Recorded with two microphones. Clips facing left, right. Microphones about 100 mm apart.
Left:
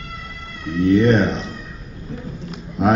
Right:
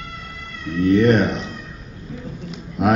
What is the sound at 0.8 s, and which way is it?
Cat, 30° left (ahead or behind).